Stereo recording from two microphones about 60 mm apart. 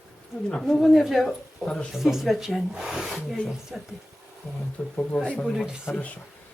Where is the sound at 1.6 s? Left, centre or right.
Centre.